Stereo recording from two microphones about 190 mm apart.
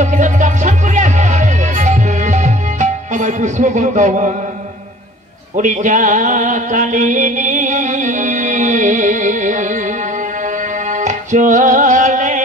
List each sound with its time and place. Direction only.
0.0 s music: 40° right (ahead or behind)
5.6 s music: 40° right (ahead or behind)
10.9 s music: 40° right (ahead or behind)